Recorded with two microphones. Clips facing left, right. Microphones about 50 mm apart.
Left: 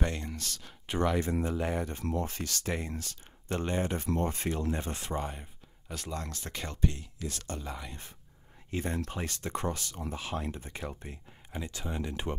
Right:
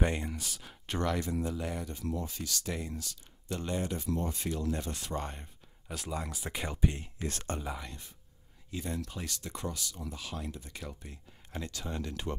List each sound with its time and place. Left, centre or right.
0.0 s speech: centre
0.8 s speech: centre
1.2 s speech: left
5.2 s speech: centre
7.0 s speech: right
7.6 s speech: centre
8.6 s speech: left
11.7 s speech: centre